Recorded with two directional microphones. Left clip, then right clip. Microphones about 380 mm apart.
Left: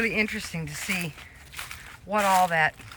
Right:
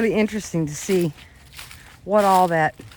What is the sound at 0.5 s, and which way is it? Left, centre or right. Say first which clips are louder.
Speech: right 11 dB; right.